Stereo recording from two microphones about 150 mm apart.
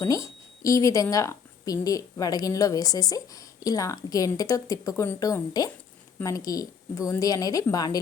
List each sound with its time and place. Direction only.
0.0 s a woman's voice: 20° left (ahead or behind)